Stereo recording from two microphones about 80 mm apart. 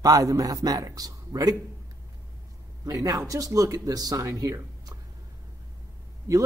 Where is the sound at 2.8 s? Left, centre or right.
Right.